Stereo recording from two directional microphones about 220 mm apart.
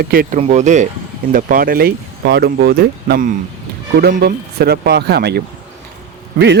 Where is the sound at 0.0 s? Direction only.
40° right (ahead or behind).